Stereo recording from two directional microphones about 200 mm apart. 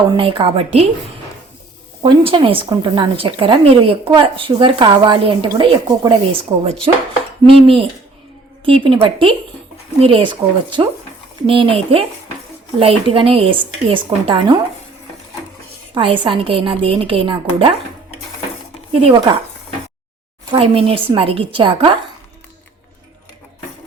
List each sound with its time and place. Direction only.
0.1 s speech: 25° right (ahead or behind)
2.0 s speech: 25° right (ahead or behind)
16.0 s speech: 25° right (ahead or behind)
19.0 s speech: 20° right (ahead or behind)
20.5 s speech: 30° right (ahead or behind)